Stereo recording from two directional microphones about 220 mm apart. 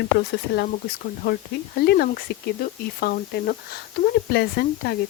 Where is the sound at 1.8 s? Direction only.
45° left (ahead or behind).